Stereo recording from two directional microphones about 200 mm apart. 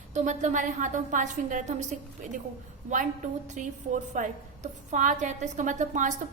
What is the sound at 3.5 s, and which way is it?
A woman's voice, 35° right (ahead or behind).